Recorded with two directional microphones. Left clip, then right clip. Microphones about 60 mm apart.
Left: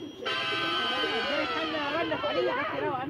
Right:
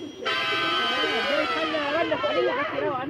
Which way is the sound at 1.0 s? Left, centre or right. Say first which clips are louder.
Right 5 dB; left.